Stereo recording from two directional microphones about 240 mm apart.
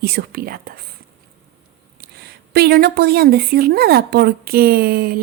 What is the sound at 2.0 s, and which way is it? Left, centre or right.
A woman's voice, right.